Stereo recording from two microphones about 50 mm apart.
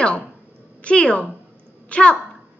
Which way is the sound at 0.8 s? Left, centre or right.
Centre.